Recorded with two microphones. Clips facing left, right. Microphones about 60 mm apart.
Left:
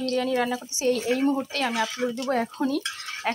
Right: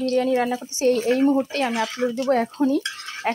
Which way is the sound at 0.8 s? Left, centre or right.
Right.